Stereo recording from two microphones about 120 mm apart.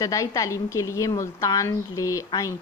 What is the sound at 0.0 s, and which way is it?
A woman's voice, 30° left (ahead or behind).